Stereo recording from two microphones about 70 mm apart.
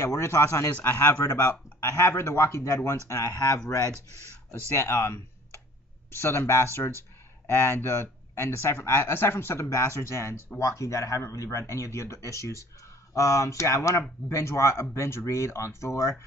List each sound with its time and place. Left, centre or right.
0.0 s speech: left
3.3 s speech: left
4.5 s speech: left
9.7 s speech: left